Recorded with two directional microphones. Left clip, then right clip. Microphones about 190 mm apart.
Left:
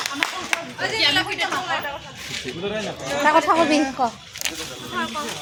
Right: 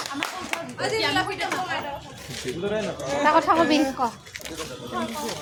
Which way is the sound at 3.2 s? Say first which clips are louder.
Left 2 dB; 40° left (ahead or behind).